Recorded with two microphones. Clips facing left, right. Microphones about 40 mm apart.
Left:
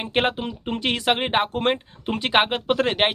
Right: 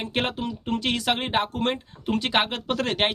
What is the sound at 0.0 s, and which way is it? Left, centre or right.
Speech, left.